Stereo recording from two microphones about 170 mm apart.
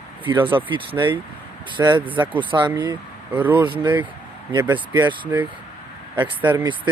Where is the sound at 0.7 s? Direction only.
30° right (ahead or behind).